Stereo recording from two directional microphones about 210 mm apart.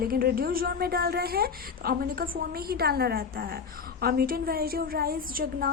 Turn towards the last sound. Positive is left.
turn(degrees=-45)  # may be behind; listen again after turning